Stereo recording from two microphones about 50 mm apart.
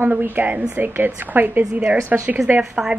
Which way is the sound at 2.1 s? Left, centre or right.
Right.